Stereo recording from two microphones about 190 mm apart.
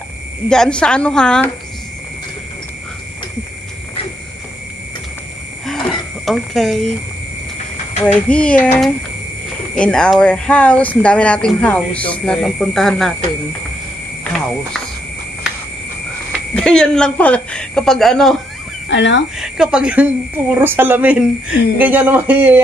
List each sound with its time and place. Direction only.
0.5 s a woman's voice: 5° left (ahead or behind)
6.2 s a woman's voice: centre (ahead or behind)
8.0 s speech: 5° left (ahead or behind)
16.5 s a woman's voice: 5° left (ahead or behind)
18.9 s speech: 70° left (ahead or behind)
19.3 s a woman's voice: 5° right (ahead or behind)